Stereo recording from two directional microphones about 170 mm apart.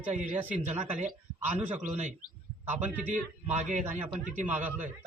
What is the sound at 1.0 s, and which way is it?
A man's voice, 10° right (ahead or behind).